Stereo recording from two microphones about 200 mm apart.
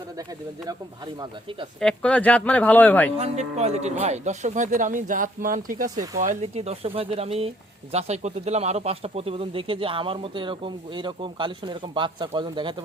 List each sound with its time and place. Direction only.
0.2 s speech: 20° right (ahead or behind)
1.8 s speech: 5° left (ahead or behind)
3.2 s speech: 35° right (ahead or behind)